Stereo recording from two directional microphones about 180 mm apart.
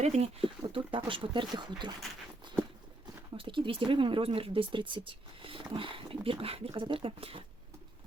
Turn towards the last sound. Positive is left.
turn(degrees=-30)  # may be behind; listen again after turning